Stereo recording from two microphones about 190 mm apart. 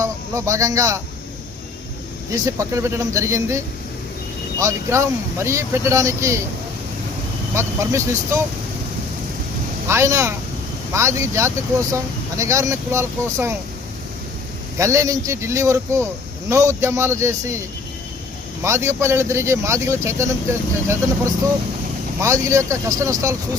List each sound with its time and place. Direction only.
0.0 s speech: 15° right (ahead or behind)
2.3 s speech: 15° right (ahead or behind)
4.6 s speech: 15° right (ahead or behind)
7.5 s speech: 15° right (ahead or behind)
9.9 s speech: 15° right (ahead or behind)
14.8 s speech: 15° right (ahead or behind)
18.6 s speech: 15° right (ahead or behind)
22.2 s speech: 15° right (ahead or behind)